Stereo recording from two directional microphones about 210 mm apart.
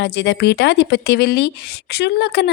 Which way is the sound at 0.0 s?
55° left (ahead or behind).